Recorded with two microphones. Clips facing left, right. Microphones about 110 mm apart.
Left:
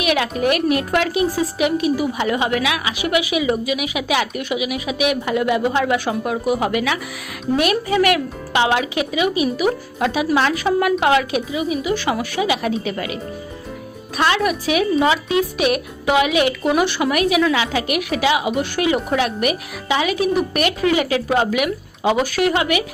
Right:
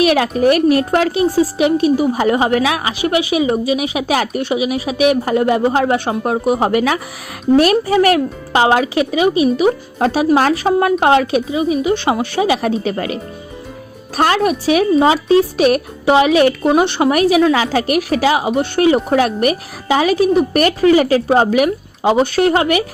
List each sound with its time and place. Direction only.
0.0 s a woman's voice: 40° right (ahead or behind)
14.2 s a woman's voice: 40° right (ahead or behind)
16.7 s a woman's voice: 30° right (ahead or behind)